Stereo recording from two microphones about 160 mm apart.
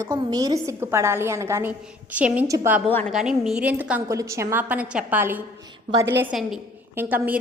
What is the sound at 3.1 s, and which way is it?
Speech, 5° right (ahead or behind).